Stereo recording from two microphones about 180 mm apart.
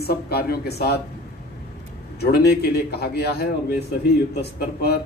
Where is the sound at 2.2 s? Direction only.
65° left (ahead or behind).